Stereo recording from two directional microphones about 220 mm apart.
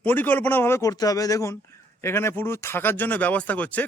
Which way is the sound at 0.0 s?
5° left (ahead or behind).